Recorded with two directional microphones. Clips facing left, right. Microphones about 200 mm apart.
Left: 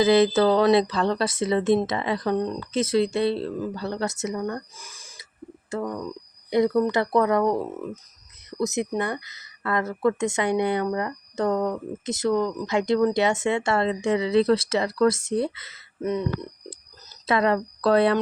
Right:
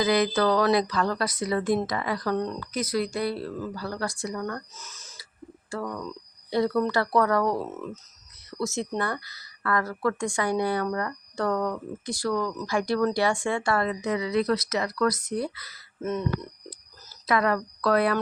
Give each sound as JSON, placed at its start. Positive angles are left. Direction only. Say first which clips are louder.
{"t": 0.0, "sound": "speech", "louder": "left 5 dB", "side_deg": 25}
{"t": 4.8, "sound": "a sound", "louder": "even", "side_deg": 10}
{"t": 5.7, "sound": "speech", "louder": "left 4 dB", "side_deg": 20}